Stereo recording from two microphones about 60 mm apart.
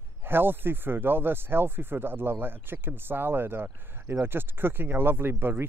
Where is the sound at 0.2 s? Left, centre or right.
Right.